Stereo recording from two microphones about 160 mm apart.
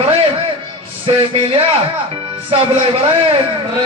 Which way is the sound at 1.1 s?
35° right (ahead or behind).